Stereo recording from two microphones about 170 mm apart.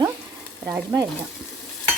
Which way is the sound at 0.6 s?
10° right (ahead or behind).